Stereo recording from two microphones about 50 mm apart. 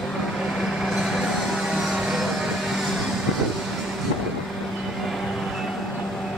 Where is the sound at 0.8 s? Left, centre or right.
Centre.